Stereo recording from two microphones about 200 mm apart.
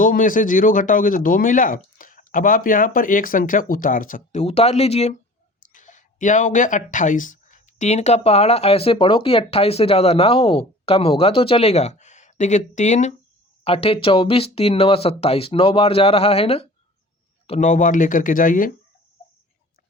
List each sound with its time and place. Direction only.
0.0 s speech: 40° left (ahead or behind)